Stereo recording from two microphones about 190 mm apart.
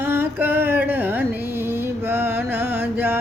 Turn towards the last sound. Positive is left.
turn(degrees=-10)  # may be behind; listen again after turning